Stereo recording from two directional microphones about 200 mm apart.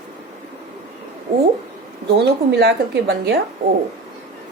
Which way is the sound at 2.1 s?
55° right (ahead or behind).